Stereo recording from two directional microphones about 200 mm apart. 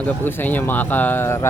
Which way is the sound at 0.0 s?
10° left (ahead or behind).